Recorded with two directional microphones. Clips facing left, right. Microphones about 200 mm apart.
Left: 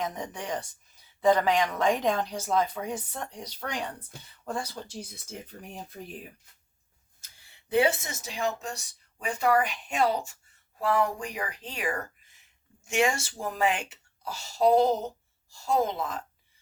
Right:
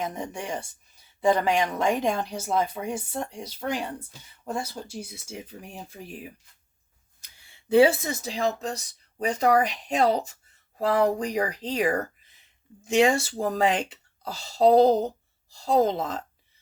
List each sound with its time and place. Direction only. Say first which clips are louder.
1.2 s speech: right 1 dB; 10° right (ahead or behind)
2.9 s speech: right 4 dB; 25° right (ahead or behind)
3.3 s speech: right 3 dB; 5° right (ahead or behind)
7.2 s speech: right 2 dB; 30° right (ahead or behind)